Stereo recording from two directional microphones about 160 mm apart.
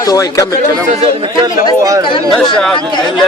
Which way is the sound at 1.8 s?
20° right (ahead or behind).